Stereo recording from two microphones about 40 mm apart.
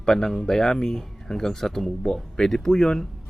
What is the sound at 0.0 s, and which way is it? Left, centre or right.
Speech, centre.